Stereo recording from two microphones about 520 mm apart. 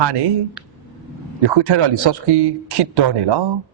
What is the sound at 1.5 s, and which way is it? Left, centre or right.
Speech, right.